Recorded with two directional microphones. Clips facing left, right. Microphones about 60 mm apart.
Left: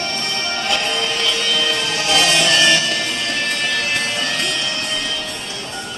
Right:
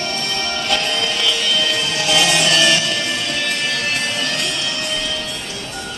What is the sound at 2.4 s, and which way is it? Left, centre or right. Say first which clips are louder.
Music: left 1 dB; left.